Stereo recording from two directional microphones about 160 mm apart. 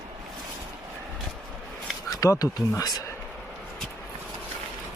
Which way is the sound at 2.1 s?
20° left (ahead or behind).